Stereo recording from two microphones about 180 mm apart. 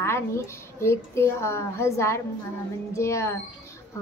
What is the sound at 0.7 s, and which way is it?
A woman's voice, 15° left (ahead or behind).